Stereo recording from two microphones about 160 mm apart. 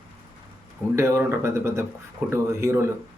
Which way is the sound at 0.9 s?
15° right (ahead or behind).